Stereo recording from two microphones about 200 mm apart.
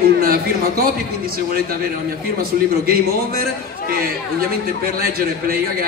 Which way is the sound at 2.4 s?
45° right (ahead or behind).